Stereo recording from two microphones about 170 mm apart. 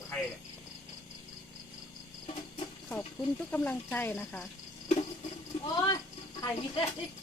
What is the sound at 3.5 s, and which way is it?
Speech, 10° left (ahead or behind).